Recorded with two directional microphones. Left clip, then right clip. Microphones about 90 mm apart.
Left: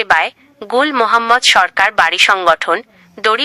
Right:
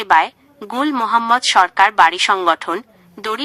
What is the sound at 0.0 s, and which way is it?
A woman's voice, 40° right (ahead or behind).